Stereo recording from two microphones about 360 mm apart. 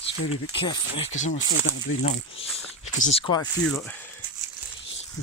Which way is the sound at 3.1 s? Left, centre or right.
Centre.